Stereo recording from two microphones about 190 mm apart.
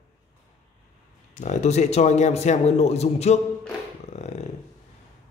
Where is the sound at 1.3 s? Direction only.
35° left (ahead or behind).